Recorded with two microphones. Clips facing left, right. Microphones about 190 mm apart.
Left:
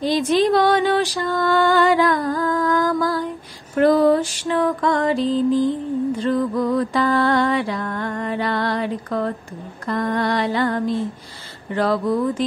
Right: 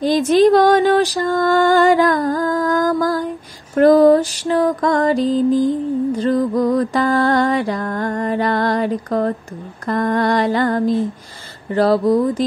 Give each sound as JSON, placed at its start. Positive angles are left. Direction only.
{"t": 0.0, "sound": "music", "side_deg": -45}
{"t": 9.8, "sound": "mantra", "side_deg": -45}
{"t": 11.7, "sound": "music", "side_deg": -35}